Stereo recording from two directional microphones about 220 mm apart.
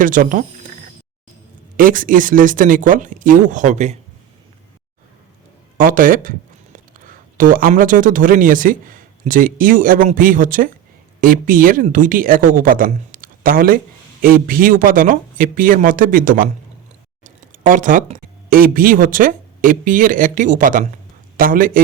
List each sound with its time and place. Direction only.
0.0 s speech: 40° right (ahead or behind)
1.7 s speech: 40° right (ahead or behind)
5.7 s speech: 40° right (ahead or behind)